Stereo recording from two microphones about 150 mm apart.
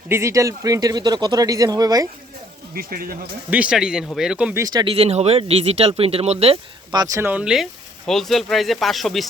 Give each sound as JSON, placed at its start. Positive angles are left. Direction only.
{"t": 0.1, "sound": "speech", "side_deg": -20}
{"t": 2.7, "sound": "speech", "side_deg": -75}
{"t": 3.5, "sound": "speech", "side_deg": -5}
{"t": 4.5, "sound": "speech", "side_deg": -25}
{"t": 6.9, "sound": "speech", "side_deg": -25}
{"t": 7.2, "sound": "speech", "side_deg": -10}